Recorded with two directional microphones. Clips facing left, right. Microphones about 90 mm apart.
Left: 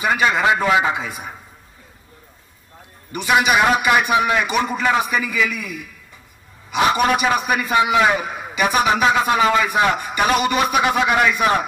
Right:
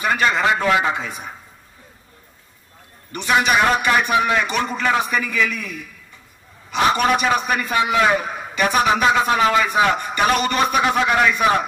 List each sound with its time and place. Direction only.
0.0 s a man's voice: 10° left (ahead or behind)
3.1 s a man's voice: 5° left (ahead or behind)